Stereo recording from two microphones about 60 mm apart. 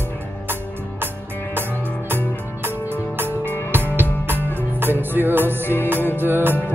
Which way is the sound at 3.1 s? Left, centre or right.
Right.